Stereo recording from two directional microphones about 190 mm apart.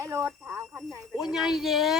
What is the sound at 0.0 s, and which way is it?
Speech, 15° right (ahead or behind).